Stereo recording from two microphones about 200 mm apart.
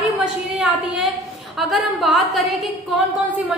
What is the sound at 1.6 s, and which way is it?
A woman's voice, centre (ahead or behind).